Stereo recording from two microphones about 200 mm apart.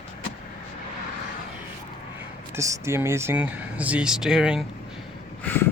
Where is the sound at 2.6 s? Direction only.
15° right (ahead or behind).